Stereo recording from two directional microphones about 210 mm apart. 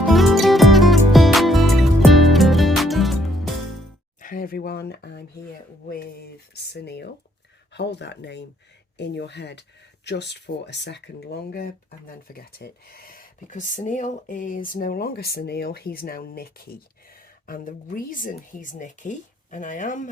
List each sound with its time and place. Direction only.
0.1 s music: centre (ahead or behind)
4.2 s speech: 40° left (ahead or behind)